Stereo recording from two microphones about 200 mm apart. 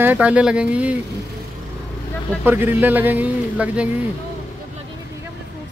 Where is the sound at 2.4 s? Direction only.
10° right (ahead or behind).